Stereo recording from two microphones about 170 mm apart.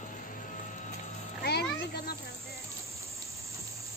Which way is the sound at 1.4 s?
70° left (ahead or behind).